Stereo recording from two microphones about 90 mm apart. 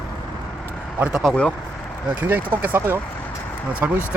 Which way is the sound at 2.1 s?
20° right (ahead or behind).